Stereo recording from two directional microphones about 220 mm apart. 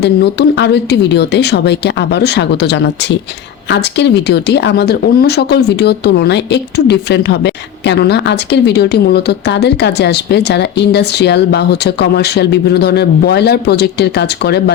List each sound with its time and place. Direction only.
0.0 s speech: 50° left (ahead or behind)